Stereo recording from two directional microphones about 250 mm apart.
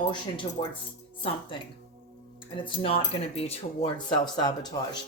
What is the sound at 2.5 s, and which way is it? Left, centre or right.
Speech, left.